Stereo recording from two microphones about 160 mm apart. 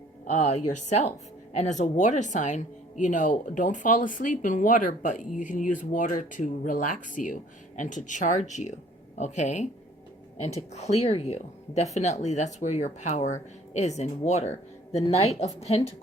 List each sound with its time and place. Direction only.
0.3 s speech: 45° left (ahead or behind)